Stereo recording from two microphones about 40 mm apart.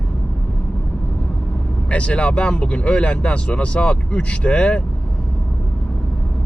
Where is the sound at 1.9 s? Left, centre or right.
Left.